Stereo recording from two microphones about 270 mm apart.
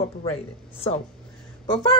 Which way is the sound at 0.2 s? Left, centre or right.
Left.